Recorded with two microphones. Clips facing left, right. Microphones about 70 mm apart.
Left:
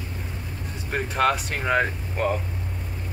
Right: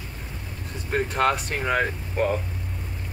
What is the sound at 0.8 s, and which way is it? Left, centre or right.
Speech, centre.